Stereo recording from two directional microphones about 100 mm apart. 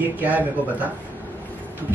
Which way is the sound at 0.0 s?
15° right (ahead or behind).